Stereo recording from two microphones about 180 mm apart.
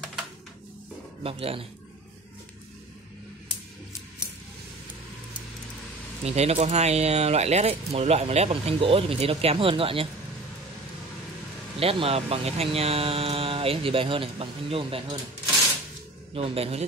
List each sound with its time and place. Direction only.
1.2 s speech: 30° right (ahead or behind)
6.2 s speech: 35° right (ahead or behind)
11.8 s speech: 30° right (ahead or behind)
16.3 s speech: 35° right (ahead or behind)